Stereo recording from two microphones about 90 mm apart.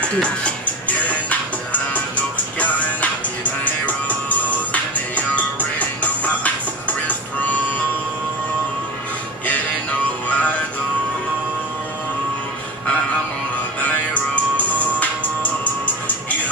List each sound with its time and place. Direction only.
0.0 s music: 15° left (ahead or behind)
10.2 s music: 15° left (ahead or behind)
13.7 s music: 15° left (ahead or behind)